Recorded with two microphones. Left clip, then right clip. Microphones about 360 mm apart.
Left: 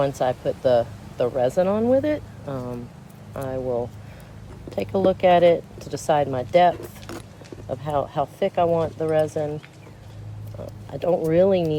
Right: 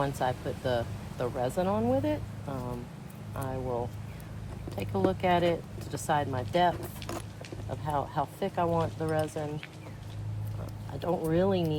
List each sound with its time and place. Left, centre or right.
0.0 s speech: left
11.0 s speech: left